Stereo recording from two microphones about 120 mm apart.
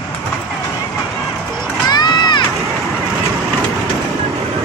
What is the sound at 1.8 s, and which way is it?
Crowd, 35° left (ahead or behind).